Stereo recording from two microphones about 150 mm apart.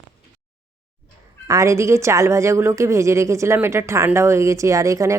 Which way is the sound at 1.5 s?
20° right (ahead or behind).